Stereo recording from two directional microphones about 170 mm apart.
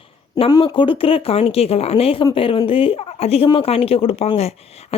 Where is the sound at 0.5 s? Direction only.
30° left (ahead or behind).